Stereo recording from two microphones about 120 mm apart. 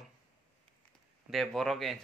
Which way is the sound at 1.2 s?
Centre (ahead or behind).